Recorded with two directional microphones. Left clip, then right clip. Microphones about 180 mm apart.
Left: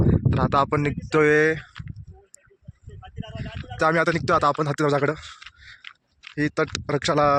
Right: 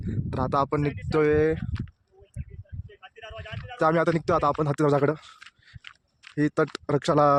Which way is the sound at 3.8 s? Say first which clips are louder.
Left 2 dB; 10° right (ahead or behind).